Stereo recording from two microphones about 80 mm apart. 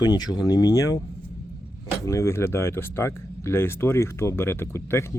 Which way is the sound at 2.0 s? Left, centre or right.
Left.